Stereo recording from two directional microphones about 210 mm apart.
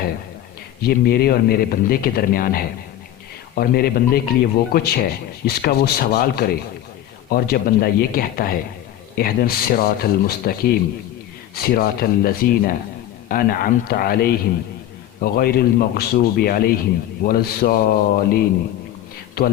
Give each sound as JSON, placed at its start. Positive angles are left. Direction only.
{"t": 0.8, "sound": "speech", "side_deg": 45}